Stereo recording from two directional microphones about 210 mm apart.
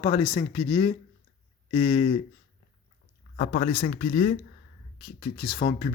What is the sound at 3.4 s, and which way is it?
Speech, 40° left (ahead or behind).